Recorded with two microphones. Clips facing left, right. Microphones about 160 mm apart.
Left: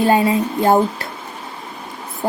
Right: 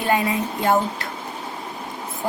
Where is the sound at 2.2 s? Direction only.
45° left (ahead or behind).